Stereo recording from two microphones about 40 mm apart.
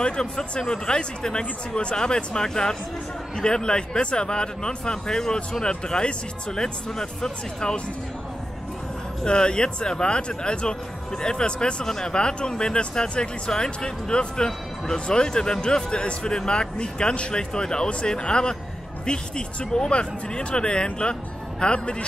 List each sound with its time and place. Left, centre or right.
0.0 s speech: left
9.2 s speech: left